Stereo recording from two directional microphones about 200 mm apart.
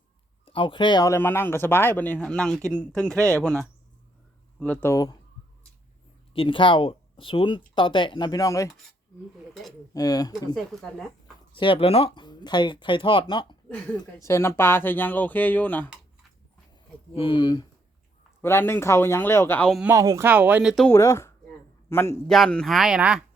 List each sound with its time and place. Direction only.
0.4 s speech: 25° left (ahead or behind); by 3.2 s 5° left (ahead or behind)
3.2 s speech: 15° right (ahead or behind)
3.4 s speech: 5° left (ahead or behind)
6.3 s speech: 25° left (ahead or behind)
9.9 s speech: 20° left (ahead or behind)
10.5 s speech: centre (ahead or behind)
11.5 s speech: 25° left (ahead or behind)
13.9 s speech: 15° left (ahead or behind)
17.2 s speech: 25° left (ahead or behind); by 19.8 s 5° left (ahead or behind)
19.8 s speech: 15° right (ahead or behind)
20.9 s a man's voice: 15° left (ahead or behind); by 23.2 s 5° right (ahead or behind)